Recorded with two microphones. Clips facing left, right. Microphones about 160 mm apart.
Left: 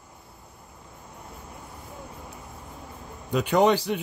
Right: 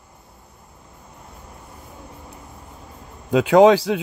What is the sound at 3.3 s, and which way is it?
Speech, 90° right.